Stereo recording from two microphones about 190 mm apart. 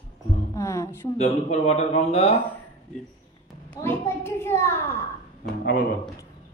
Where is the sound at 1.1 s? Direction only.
35° left (ahead or behind).